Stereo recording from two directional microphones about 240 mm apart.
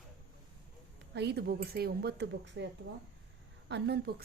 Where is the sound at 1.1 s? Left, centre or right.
Right.